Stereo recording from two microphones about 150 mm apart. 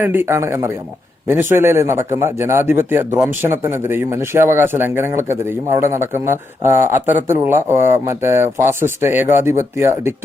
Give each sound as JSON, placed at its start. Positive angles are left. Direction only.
{"t": 0.0, "sound": "speech", "side_deg": -15}